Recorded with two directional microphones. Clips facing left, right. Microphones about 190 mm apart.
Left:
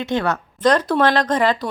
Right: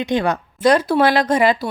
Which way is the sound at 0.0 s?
15° right (ahead or behind).